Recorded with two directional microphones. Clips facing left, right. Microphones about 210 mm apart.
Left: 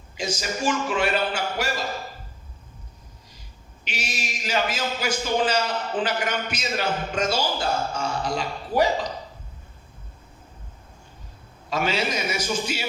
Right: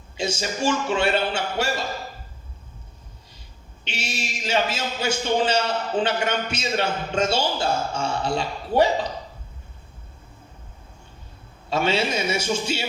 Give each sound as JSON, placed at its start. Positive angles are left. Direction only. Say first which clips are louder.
{"t": 0.2, "sound": "a man's voice", "louder": "right 2 dB", "side_deg": -30}
{"t": 3.8, "sound": "a man's voice", "louder": "right 1 dB", "side_deg": -30}
{"t": 11.7, "sound": "a man's voice", "louder": "right 3 dB", "side_deg": -30}